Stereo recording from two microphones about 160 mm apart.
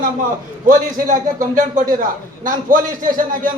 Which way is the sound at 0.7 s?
55° right (ahead or behind).